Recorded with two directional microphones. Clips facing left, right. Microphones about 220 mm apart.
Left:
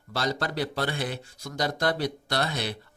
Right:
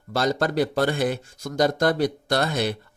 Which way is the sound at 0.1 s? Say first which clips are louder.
Right 6 dB; 45° right (ahead or behind).